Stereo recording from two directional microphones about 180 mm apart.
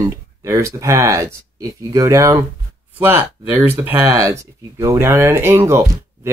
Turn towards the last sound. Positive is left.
turn(degrees=-10)  # may be behind; listen again after turning